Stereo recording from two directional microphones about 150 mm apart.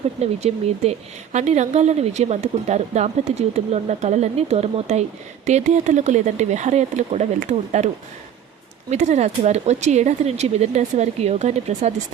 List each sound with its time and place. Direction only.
0.2 s speech: 45° right (ahead or behind)
8.9 s speech: 50° right (ahead or behind)